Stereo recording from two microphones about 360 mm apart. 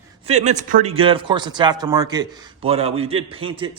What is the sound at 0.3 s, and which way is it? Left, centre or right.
Speech, centre.